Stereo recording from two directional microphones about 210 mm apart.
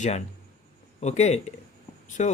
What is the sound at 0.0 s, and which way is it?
Speech, 35° left (ahead or behind).